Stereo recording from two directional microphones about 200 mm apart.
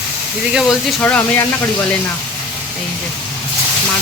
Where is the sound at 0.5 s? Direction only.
Centre (ahead or behind).